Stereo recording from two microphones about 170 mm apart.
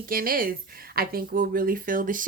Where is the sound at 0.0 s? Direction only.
55° right (ahead or behind).